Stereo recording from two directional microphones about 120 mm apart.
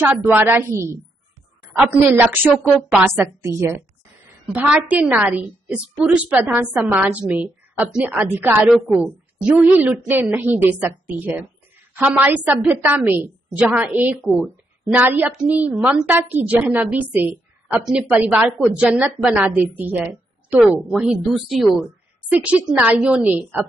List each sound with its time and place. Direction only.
0.0 s a woman's voice: 15° right (ahead or behind)
1.9 s a woman's voice: 15° right (ahead or behind)
3.4 s a woman's voice: 25° right (ahead or behind)
4.5 s a woman's voice: 10° right (ahead or behind)
8.6 s speech: 5° left (ahead or behind)
8.9 s a woman's voice: 10° right (ahead or behind)
18.9 s a woman's voice: 10° right (ahead or behind)
22.3 s a woman's voice: 15° right (ahead or behind)